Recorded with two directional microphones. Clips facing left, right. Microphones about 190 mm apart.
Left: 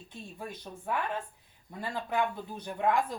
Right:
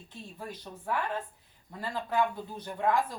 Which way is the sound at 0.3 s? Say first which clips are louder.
Even; 15° left (ahead or behind).